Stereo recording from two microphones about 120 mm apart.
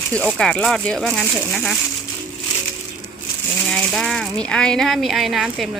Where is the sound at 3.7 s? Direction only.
5° left (ahead or behind).